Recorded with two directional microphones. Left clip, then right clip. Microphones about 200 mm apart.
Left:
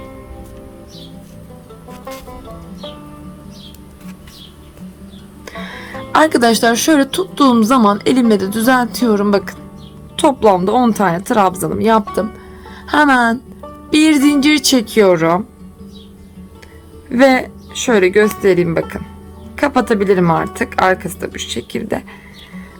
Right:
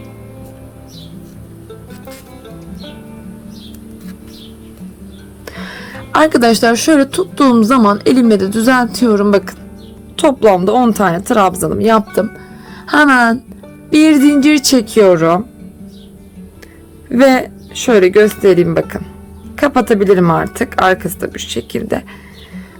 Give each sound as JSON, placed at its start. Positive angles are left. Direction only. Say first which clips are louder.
{"t": 5.5, "sound": "speech", "louder": "even", "side_deg": -15}
{"t": 17.1, "sound": "speech", "louder": "right 1 dB", "side_deg": -15}